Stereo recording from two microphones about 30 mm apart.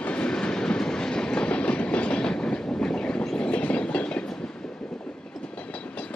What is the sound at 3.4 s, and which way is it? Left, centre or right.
Train, left.